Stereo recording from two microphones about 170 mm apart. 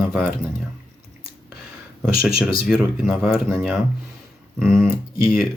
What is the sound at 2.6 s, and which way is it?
Speech, 5° right (ahead or behind).